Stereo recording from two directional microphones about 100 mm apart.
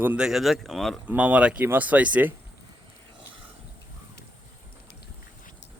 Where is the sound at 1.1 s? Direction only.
15° right (ahead or behind).